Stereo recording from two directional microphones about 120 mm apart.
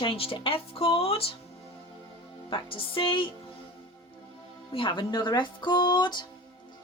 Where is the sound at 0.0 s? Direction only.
50° left (ahead or behind).